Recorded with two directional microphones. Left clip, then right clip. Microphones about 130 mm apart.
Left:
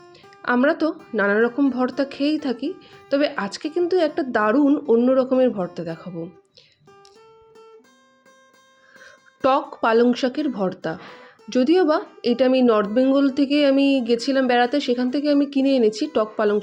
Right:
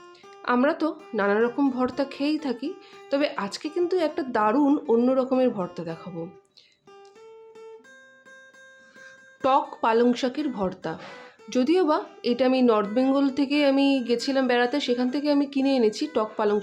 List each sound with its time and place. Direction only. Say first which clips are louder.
0.4 s speech: left 4 dB; 25° left (ahead or behind)
9.4 s speech: left 3 dB; 20° left (ahead or behind)